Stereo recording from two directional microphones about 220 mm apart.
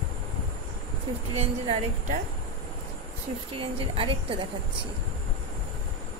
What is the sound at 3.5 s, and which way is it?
Speech, 25° right (ahead or behind).